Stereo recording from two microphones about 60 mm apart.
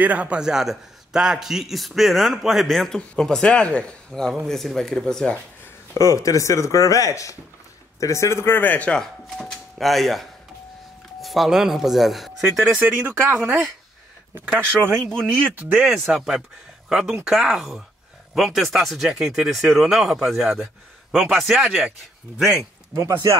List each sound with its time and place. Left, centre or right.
0.0 s a man's voice: right
0.4 s a man's voice: centre
5.9 s speech: left
8.5 s speech: left
8.9 s speech: centre
12.7 s speech: right
15.9 s a man's voice: centre
22.6 s speech: right